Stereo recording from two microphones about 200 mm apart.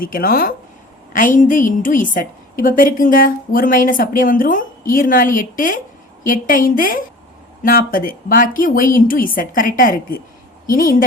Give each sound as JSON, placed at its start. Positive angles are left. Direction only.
{"t": 0.0, "sound": "a woman's voice", "side_deg": 45}